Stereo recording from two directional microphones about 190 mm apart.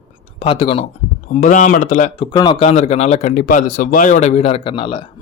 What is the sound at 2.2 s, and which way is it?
Speech, 25° left (ahead or behind).